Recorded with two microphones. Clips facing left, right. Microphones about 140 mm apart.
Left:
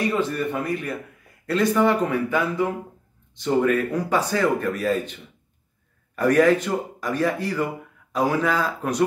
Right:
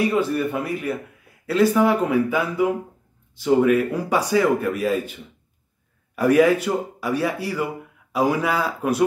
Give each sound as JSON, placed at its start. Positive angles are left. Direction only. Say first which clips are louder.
{"t": 0.0, "sound": "speech", "louder": "right 3 dB", "side_deg": -10}